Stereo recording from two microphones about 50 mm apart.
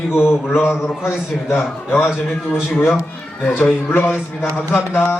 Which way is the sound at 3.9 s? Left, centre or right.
Left.